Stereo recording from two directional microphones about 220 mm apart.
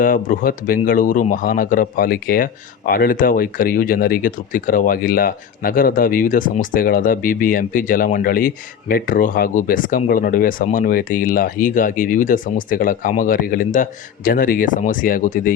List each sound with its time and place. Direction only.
0.0 s speech: 40° left (ahead or behind)